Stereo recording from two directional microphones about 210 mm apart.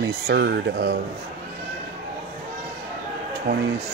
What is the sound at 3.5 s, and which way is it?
Speech, 45° right (ahead or behind).